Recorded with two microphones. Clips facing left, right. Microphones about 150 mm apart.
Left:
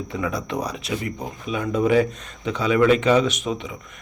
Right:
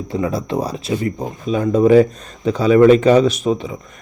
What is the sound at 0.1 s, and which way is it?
Speech, 35° right (ahead or behind).